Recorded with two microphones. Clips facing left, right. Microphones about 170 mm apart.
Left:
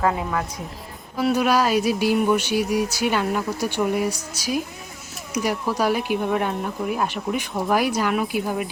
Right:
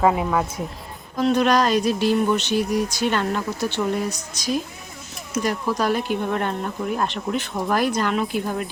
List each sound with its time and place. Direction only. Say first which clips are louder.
0.0 s a woman's voice: right 4 dB; 15° right (ahead or behind)
1.1 s speech: right 1 dB; 10° left (ahead or behind)